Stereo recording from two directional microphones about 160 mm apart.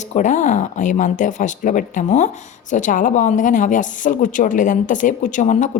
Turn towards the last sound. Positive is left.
turn(degrees=50)  # may be behind; listen again after turning